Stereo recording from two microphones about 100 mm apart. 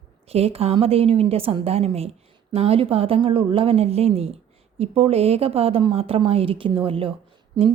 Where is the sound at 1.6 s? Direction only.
90° right.